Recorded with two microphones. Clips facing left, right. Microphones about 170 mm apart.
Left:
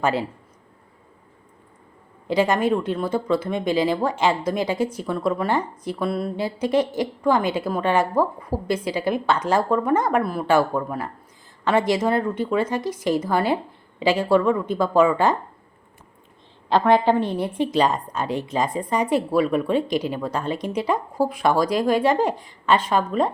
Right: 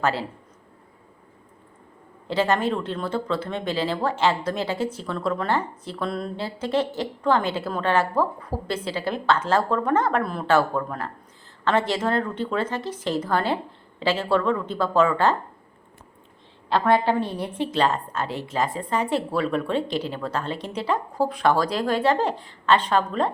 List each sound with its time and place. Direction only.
0.0 s speech: 15° left (ahead or behind)
2.2 s speech: 15° left (ahead or behind)
17.3 s speech: 15° left (ahead or behind)